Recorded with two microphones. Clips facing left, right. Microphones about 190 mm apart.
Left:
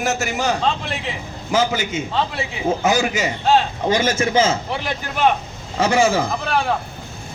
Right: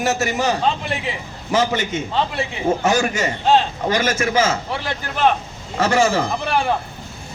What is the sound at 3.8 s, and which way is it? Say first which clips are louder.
A man's voice: left 1 dB; 20° left (ahead or behind).